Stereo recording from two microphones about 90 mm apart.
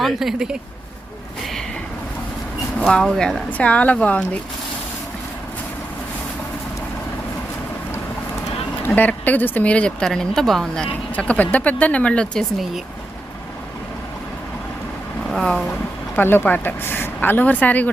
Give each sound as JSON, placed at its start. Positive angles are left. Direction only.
{"t": 0.0, "sound": "speech", "side_deg": -5}
{"t": 2.9, "sound": "speech", "side_deg": 5}
{"t": 9.0, "sound": "speech", "side_deg": 20}
{"t": 11.1, "sound": "speech", "side_deg": 15}
{"t": 15.3, "sound": "speech", "side_deg": 0}
{"t": 16.1, "sound": "speech", "side_deg": 25}